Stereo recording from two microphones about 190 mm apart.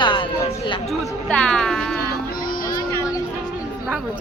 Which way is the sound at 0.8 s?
5° left (ahead or behind).